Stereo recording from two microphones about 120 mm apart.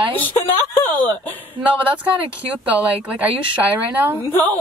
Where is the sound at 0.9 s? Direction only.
15° left (ahead or behind).